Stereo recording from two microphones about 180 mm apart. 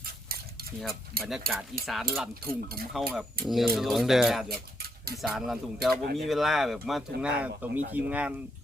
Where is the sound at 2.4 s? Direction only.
55° right (ahead or behind).